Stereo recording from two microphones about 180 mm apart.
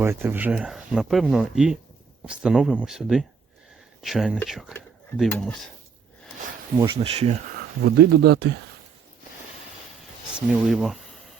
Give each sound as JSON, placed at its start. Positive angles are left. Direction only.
{"t": 0.0, "sound": "speech", "side_deg": -10}
{"t": 6.7, "sound": "speech", "side_deg": -20}
{"t": 7.0, "sound": "speech", "side_deg": -35}
{"t": 7.8, "sound": "speech", "side_deg": -60}
{"t": 10.3, "sound": "speech", "side_deg": -5}